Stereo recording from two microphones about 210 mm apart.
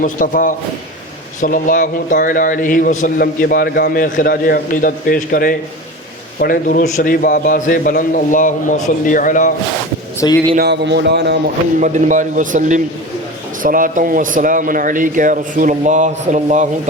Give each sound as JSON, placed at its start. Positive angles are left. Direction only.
{"t": 0.0, "sound": "a man's voice", "side_deg": 40}
{"t": 10.2, "sound": "speech", "side_deg": 15}
{"t": 10.5, "sound": "speech", "side_deg": -50}
{"t": 11.8, "sound": "a man's voice", "side_deg": -35}